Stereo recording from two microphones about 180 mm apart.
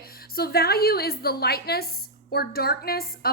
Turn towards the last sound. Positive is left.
turn(degrees=55)  # may be behind; listen again after turning